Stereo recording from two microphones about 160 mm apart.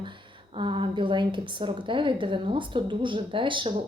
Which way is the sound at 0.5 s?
30° right (ahead or behind).